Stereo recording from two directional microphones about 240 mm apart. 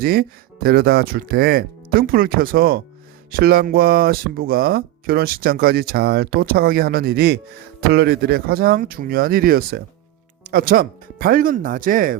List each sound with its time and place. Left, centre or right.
0.0 s speech: right